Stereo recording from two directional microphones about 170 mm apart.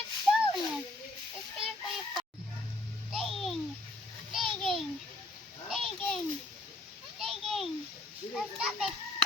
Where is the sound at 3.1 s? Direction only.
Centre (ahead or behind).